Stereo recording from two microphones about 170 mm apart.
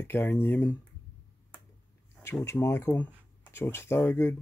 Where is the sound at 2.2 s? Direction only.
15° left (ahead or behind).